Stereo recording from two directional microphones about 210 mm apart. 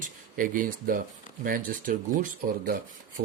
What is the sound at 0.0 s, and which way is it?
Speech, 40° right (ahead or behind).